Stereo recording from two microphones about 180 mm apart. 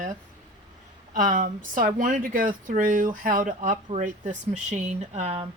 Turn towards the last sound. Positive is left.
turn(degrees=-35)  # may be behind; listen again after turning